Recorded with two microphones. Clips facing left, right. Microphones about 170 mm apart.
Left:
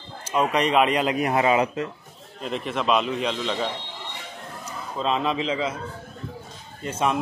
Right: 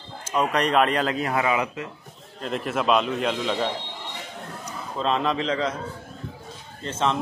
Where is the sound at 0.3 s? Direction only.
5° left (ahead or behind).